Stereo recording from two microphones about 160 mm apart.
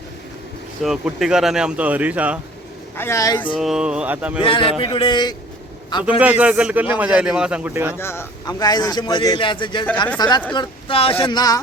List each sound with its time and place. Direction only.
0.8 s a man's voice: centre (ahead or behind)
3.0 s a man's voice: 20° left (ahead or behind)
3.6 s a man's voice: 5° right (ahead or behind)
4.4 s a man's voice: 30° left (ahead or behind)
6.1 s a man's voice: 10° right (ahead or behind)
7.9 s a man's voice: 15° left (ahead or behind)